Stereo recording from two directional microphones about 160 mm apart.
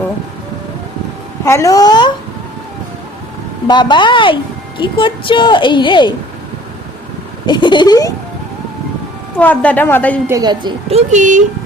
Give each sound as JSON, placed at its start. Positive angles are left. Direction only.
{"t": 1.5, "sound": "a woman's voice", "side_deg": 20}
{"t": 3.7, "sound": "a woman's voice", "side_deg": 30}
{"t": 7.4, "sound": "speech", "side_deg": 30}
{"t": 9.4, "sound": "a woman's voice", "side_deg": 10}
{"t": 10.2, "sound": "a woman's voice", "side_deg": -25}
{"t": 10.9, "sound": "speech", "side_deg": -50}